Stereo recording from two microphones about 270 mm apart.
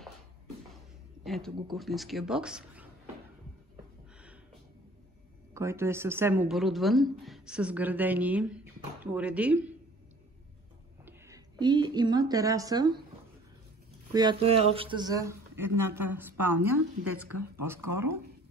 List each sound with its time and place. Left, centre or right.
1.2 s a woman's voice: centre
5.5 s a woman's voice: centre
11.1 s speech: centre
14.1 s speech: centre
16.7 s a woman's voice: right